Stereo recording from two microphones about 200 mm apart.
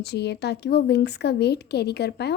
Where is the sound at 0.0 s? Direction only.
55° left (ahead or behind).